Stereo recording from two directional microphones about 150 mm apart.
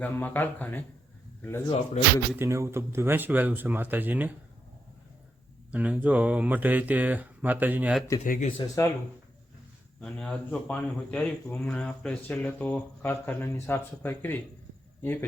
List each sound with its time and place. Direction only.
0.0 s speech: 10° left (ahead or behind)
2.3 s speech: 15° right (ahead or behind)
5.7 s speech: 10° right (ahead or behind)
8.2 s speech: 55° left (ahead or behind)
8.5 s speech: 25° left (ahead or behind)
10.0 s speech: 5° left (ahead or behind)